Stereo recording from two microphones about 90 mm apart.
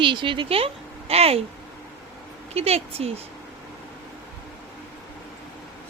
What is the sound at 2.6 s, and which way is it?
Speech, 90° right.